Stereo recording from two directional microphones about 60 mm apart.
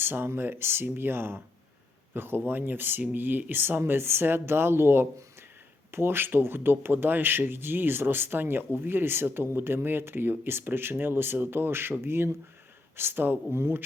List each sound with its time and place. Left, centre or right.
0.0 s speech: right